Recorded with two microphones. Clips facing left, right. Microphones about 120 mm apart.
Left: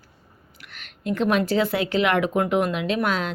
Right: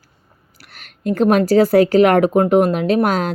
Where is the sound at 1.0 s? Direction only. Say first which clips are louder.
Right 7 dB; 40° right (ahead or behind).